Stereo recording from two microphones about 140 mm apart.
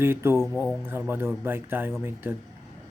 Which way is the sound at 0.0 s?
15° right (ahead or behind).